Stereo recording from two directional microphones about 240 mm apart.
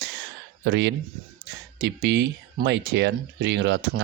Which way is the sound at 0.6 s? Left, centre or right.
Right.